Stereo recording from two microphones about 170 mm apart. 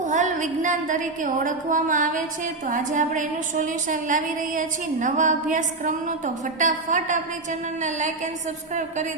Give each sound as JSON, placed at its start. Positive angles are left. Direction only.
{"t": 0.0, "sound": "a woman's voice", "side_deg": -45}